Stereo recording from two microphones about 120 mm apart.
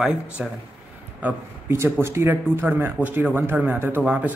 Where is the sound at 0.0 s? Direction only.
5° right (ahead or behind).